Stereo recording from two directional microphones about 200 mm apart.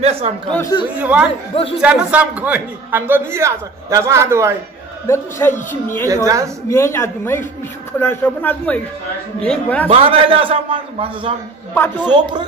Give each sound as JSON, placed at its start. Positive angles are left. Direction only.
{"t": 0.0, "sound": "a man's voice", "side_deg": -30}
{"t": 0.5, "sound": "a man's voice", "side_deg": 15}
{"t": 0.9, "sound": "a man's voice", "side_deg": -5}
{"t": 1.5, "sound": "speech", "side_deg": 30}
{"t": 1.8, "sound": "a man's voice", "side_deg": -5}
{"t": 5.0, "sound": "a man's voice", "side_deg": 15}
{"t": 6.2, "sound": "a man's voice", "side_deg": -15}
{"t": 6.7, "sound": "a man's voice", "side_deg": 15}
{"t": 9.8, "sound": "a man's voice", "side_deg": -30}